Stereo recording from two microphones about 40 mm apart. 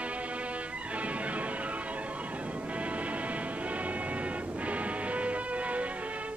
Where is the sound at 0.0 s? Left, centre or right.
Right.